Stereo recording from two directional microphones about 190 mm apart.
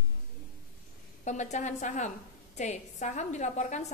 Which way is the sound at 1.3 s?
40° left (ahead or behind).